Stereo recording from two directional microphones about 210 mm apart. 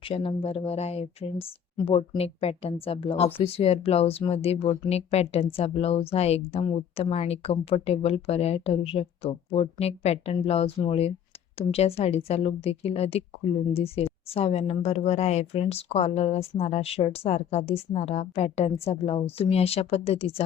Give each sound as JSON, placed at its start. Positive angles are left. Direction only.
{"t": 0.2, "sound": "a woman's voice", "side_deg": 25}